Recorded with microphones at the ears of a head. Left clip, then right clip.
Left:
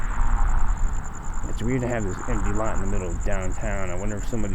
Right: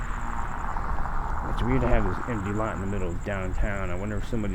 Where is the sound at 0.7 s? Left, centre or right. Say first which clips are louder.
Right 6 dB; right.